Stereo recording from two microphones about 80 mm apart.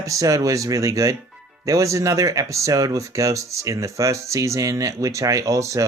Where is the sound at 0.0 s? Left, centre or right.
Right.